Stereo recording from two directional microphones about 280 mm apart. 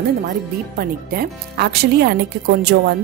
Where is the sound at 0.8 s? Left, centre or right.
Right.